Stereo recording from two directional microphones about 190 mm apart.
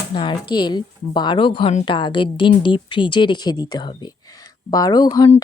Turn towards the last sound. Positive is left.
turn(degrees=20)  # may be behind; listen again after turning